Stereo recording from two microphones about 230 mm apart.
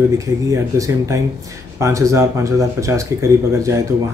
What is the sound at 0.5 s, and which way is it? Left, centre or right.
Speech, centre.